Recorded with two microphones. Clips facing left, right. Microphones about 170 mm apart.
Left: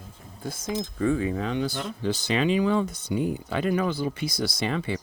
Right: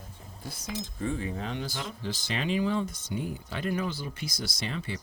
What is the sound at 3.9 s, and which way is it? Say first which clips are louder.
Speech: left 8 dB; 60° left (ahead or behind).